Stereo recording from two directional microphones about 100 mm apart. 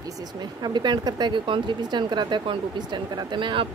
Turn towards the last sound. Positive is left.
turn(degrees=-55)  # may be behind; listen again after turning